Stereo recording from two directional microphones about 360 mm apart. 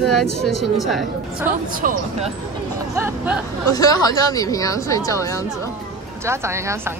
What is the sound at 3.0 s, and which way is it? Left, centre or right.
Speech, centre.